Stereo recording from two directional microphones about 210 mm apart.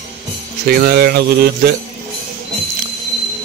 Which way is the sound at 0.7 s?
45° right (ahead or behind).